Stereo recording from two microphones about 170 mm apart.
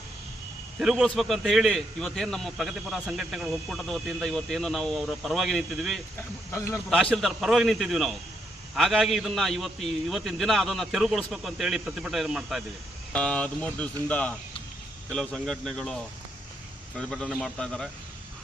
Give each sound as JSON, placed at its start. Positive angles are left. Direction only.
{"t": 0.8, "sound": "a man's voice", "side_deg": -5}
{"t": 6.5, "sound": "speech", "side_deg": 15}
{"t": 6.9, "sound": "a man's voice", "side_deg": 0}
{"t": 17.0, "sound": "a man's voice", "side_deg": 5}